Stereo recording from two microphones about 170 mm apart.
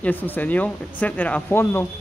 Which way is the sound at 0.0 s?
10° left (ahead or behind).